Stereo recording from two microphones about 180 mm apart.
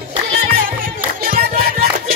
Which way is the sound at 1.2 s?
55° right (ahead or behind).